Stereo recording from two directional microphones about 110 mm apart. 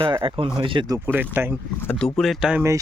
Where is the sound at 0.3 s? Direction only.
50° right (ahead or behind).